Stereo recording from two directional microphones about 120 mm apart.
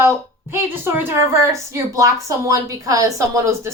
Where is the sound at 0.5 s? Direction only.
15° right (ahead or behind).